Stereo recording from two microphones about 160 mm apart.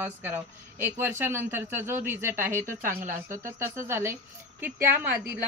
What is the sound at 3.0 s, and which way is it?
Speech, 55° right (ahead or behind).